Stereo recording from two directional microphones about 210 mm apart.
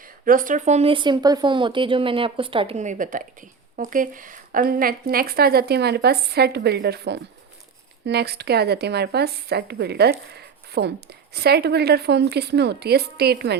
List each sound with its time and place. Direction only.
0.0 s speech: 40° right (ahead or behind)